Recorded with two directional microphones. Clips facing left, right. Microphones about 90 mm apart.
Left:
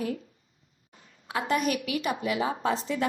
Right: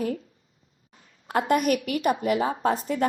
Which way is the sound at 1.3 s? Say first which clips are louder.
Right 5 dB; 45° right (ahead or behind).